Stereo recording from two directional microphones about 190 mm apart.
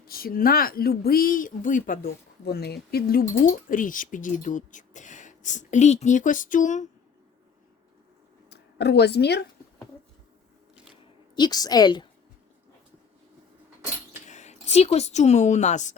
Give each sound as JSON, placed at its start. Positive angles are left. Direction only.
{"t": 0.0, "sound": "speech", "side_deg": 50}
{"t": 8.4, "sound": "a woman's voice", "side_deg": 60}
{"t": 11.3, "sound": "a woman's voice", "side_deg": 20}
{"t": 14.3, "sound": "speech", "side_deg": 35}